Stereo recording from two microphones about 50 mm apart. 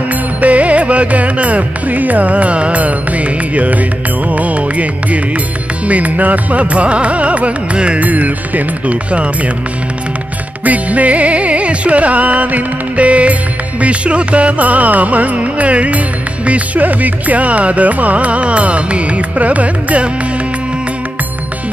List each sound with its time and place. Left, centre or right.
0.4 s music: right
10.6 s music: right